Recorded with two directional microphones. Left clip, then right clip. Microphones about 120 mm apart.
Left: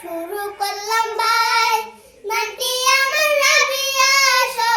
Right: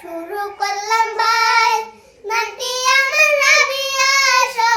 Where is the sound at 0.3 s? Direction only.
25° right (ahead or behind).